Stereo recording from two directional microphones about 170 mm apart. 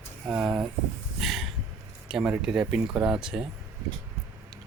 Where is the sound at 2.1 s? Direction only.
5° right (ahead or behind).